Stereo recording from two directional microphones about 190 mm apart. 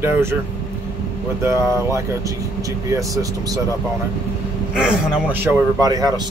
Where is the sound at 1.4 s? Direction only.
15° right (ahead or behind).